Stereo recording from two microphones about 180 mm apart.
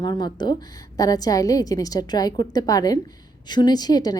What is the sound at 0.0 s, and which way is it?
A woman's voice, 25° left (ahead or behind).